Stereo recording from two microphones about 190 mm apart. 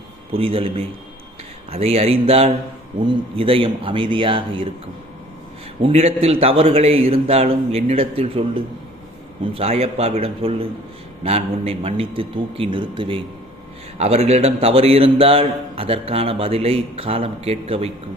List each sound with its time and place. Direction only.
0.3 s a man's voice: 30° right (ahead or behind)
5.8 s a man's voice: 30° right (ahead or behind)